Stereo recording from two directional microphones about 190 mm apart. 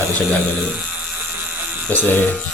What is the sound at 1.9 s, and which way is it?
Speech, 10° left (ahead or behind).